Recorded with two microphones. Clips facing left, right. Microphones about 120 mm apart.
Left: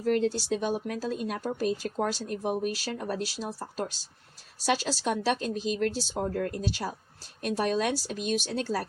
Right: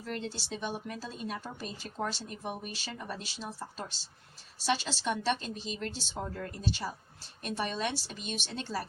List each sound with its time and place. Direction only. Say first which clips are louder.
0.1 s speech: left 12 dB; 45° left (ahead or behind)
4.5 s speech: left 4 dB; 45° left (ahead or behind)